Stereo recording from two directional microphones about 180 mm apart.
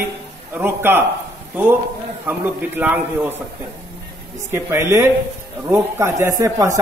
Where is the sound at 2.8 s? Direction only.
10° right (ahead or behind).